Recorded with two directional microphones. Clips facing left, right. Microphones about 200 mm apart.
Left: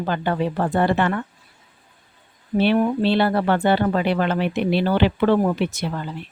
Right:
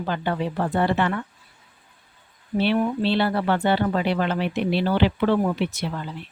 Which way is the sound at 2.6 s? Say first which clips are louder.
Left 3 dB; 50° left (ahead or behind).